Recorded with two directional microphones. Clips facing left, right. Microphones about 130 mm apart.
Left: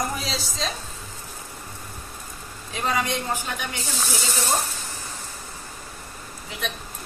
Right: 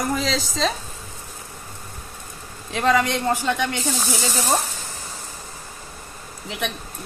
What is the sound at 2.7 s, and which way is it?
Speech, 75° right (ahead or behind).